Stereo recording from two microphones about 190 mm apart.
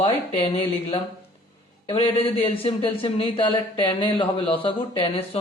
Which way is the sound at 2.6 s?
30° left (ahead or behind).